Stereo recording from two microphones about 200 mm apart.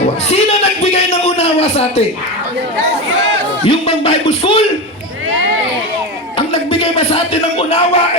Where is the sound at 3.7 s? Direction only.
30° left (ahead or behind).